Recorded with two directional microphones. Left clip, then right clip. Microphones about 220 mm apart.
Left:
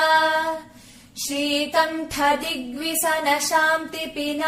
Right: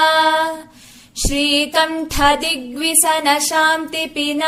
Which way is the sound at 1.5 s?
40° right (ahead or behind).